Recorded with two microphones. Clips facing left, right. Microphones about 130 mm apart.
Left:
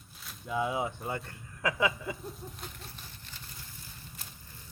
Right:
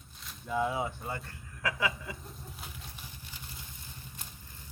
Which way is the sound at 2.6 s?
5° right (ahead or behind).